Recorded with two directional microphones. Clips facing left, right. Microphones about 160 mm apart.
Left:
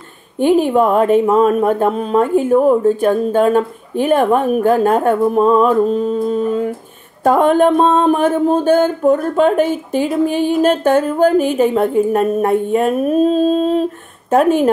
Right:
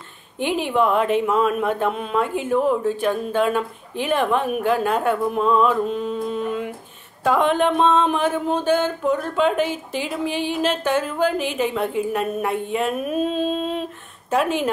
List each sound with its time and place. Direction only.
0.4 s speech: 45° left (ahead or behind)